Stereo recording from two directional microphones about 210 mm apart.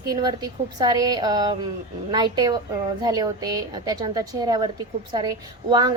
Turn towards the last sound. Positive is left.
turn(degrees=-20)  # may be behind; listen again after turning